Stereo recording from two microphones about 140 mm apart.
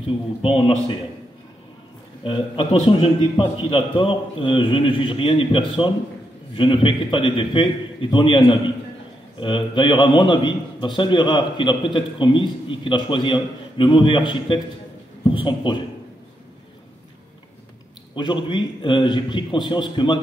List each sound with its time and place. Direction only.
0.0 s a man's voice: 40° left (ahead or behind)
2.2 s a man's voice: 35° left (ahead or behind)
18.1 s a man's voice: 35° left (ahead or behind)